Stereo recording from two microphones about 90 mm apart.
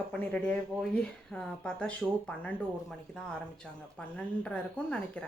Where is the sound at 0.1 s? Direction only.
15° left (ahead or behind).